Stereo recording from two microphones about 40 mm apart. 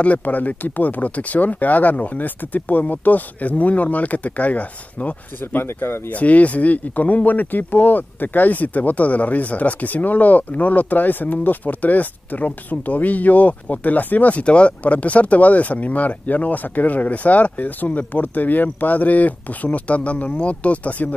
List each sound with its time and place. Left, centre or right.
0.0 s speech: left
5.4 s speech: left
6.0 s speech: left
14.4 s speech: left